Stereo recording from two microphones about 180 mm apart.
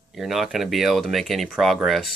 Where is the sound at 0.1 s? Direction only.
Centre (ahead or behind).